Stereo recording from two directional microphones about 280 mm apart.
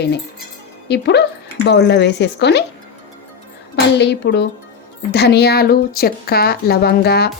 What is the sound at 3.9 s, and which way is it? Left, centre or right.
Speech, left.